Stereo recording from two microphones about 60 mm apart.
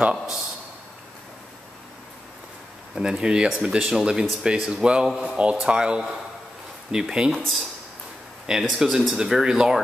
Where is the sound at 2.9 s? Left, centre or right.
Centre.